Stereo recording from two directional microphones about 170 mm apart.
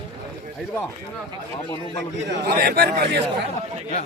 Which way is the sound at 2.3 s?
70° right (ahead or behind).